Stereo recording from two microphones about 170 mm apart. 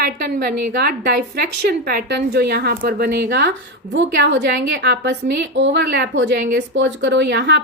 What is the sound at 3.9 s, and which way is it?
A woman's voice, 90° right.